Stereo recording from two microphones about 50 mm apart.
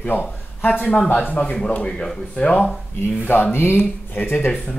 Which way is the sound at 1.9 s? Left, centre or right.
Centre.